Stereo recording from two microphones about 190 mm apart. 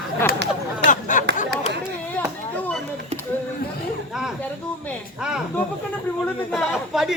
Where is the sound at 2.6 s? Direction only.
10° left (ahead or behind).